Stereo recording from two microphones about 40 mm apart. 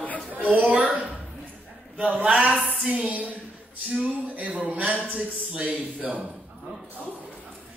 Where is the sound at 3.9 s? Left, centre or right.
Right.